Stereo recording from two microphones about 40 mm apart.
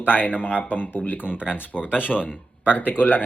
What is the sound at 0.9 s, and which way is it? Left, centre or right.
Speech, left.